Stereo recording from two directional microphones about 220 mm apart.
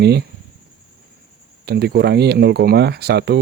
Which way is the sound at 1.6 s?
45° right (ahead or behind).